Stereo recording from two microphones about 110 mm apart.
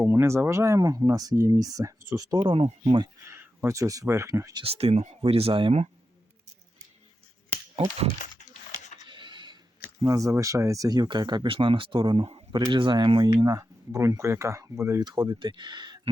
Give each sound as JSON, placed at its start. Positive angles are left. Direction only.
{"t": 0.0, "sound": "speech", "side_deg": -25}
{"t": 2.6, "sound": "speech", "side_deg": -70}
{"t": 3.2, "sound": "speech", "side_deg": -20}
{"t": 4.6, "sound": "speech", "side_deg": -65}
{"t": 9.0, "sound": "a sound", "side_deg": -45}
{"t": 10.0, "sound": "speech", "side_deg": -30}
{"t": 12.5, "sound": "speech", "side_deg": -40}
{"t": 15.0, "sound": "speech", "side_deg": -40}